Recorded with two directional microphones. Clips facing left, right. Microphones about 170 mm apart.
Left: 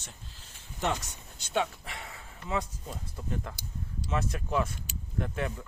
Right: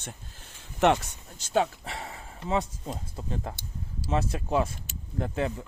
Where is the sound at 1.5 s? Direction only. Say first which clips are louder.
Right 5 dB; 35° right (ahead or behind).